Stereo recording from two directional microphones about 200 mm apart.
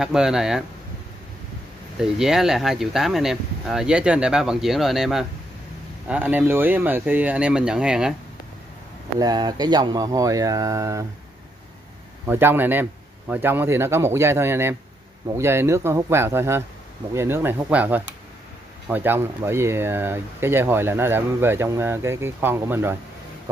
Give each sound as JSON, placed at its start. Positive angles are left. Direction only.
{"t": 0.0, "sound": "speech", "side_deg": -5}
{"t": 2.0, "sound": "speech", "side_deg": -5}
{"t": 9.2, "sound": "speech", "side_deg": -20}
{"t": 12.3, "sound": "speech", "side_deg": -10}